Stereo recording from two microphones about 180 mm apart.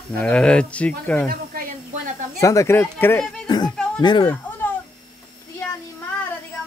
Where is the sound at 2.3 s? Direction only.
15° left (ahead or behind).